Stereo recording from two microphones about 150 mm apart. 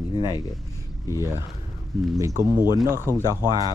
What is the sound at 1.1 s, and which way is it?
Speech, 20° right (ahead or behind).